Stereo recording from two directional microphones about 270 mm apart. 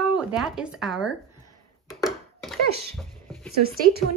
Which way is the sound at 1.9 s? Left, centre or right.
Centre.